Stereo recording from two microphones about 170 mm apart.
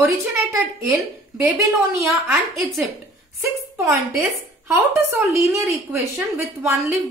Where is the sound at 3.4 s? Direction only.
15° right (ahead or behind).